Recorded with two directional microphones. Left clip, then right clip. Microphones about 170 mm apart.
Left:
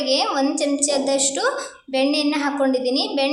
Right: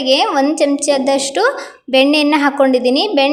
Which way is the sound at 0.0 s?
35° right (ahead or behind).